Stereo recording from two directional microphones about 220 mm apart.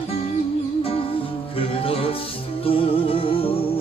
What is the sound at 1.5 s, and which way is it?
Music, 25° left (ahead or behind).